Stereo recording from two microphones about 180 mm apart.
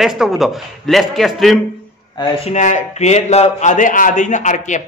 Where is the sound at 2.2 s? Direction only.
40° left (ahead or behind).